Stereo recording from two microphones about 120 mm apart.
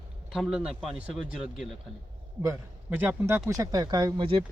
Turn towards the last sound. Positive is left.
turn(degrees=-45)  # may be behind; listen again after turning